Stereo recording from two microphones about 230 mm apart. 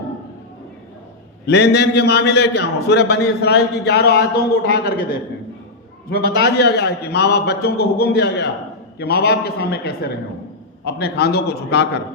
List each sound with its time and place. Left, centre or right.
1.5 s a man's voice: left
6.1 s a man's voice: left